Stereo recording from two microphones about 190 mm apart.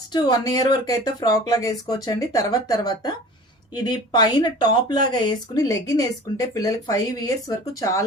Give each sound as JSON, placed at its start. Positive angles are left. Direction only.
{"t": 0.1, "sound": "speech", "side_deg": 20}